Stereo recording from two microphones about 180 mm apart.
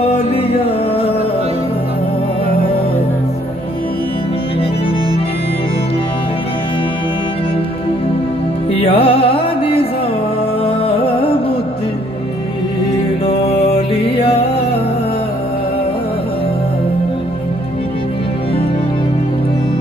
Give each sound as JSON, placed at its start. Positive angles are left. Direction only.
{"t": 8.8, "sound": "music", "side_deg": 30}
{"t": 13.5, "sound": "music", "side_deg": 30}